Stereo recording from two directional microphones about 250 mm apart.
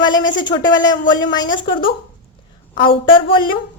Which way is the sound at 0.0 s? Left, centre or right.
Centre.